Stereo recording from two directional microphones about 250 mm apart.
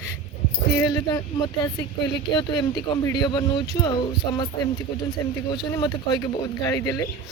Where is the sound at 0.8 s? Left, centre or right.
Centre.